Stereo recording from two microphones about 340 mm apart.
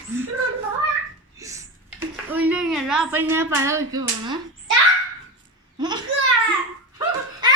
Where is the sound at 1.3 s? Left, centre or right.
Centre.